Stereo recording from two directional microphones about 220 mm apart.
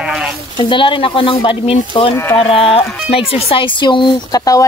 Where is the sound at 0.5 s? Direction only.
25° left (ahead or behind).